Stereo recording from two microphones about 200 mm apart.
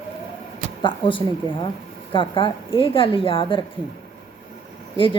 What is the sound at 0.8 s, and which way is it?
Speech, 25° left (ahead or behind).